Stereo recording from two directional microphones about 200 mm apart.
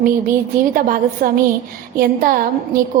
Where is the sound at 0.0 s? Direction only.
45° right (ahead or behind).